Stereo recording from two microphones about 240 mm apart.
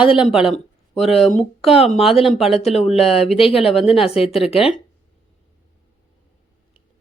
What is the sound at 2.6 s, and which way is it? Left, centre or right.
Speech, left.